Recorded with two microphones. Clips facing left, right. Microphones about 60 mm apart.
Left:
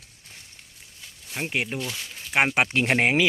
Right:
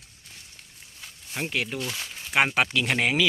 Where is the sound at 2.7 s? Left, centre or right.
Left.